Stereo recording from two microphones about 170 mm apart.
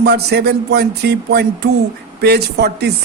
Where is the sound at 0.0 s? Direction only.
75° right (ahead or behind).